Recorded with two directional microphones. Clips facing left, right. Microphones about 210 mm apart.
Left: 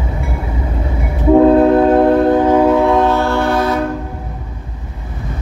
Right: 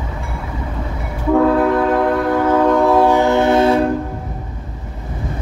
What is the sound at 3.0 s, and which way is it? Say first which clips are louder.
Train: right 1 dB; 15° right (ahead or behind).